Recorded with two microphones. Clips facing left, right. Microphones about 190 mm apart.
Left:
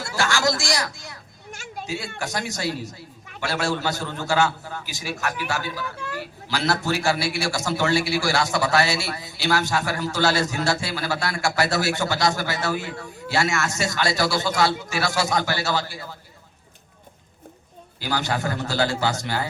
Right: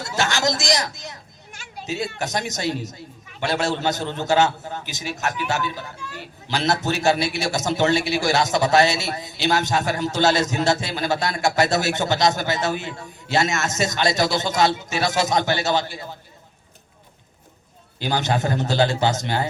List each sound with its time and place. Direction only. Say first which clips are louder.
0.0 s a sound: even; 20° right (ahead or behind)
1.5 s children playing: left 3 dB; 45° left (ahead or behind)
2.1 s a man's voice: right 2 dB; 20° right (ahead or behind)
18.0 s a man's voice: right 3 dB; 20° right (ahead or behind)